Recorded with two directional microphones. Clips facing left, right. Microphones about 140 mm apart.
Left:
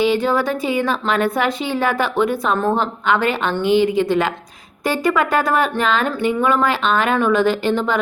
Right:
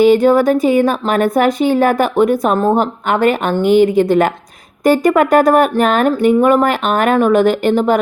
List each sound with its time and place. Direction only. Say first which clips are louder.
0.0 s a woman's voice: right 8 dB; 45° right (ahead or behind)